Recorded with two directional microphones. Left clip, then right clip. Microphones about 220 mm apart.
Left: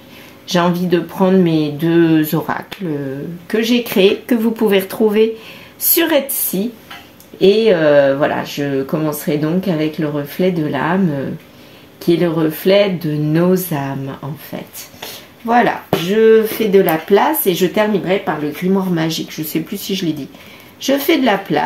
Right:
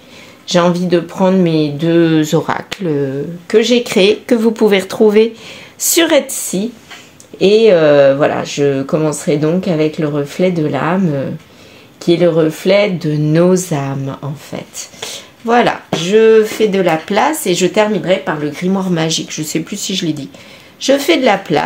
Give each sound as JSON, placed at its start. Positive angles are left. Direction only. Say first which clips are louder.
{"t": 0.5, "sound": "speech", "louder": "right 3 dB", "side_deg": -30}
{"t": 12.0, "sound": "speech", "louder": "right 4 dB", "side_deg": -30}